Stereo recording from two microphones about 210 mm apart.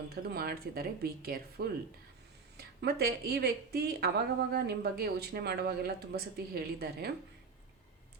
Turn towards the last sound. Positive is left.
turn(degrees=-50)  # may be behind; listen again after turning